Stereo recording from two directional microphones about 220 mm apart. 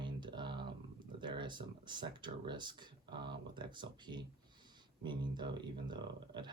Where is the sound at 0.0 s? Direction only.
20° right (ahead or behind).